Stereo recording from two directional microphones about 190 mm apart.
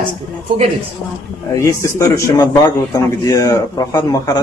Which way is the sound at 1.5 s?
15° left (ahead or behind).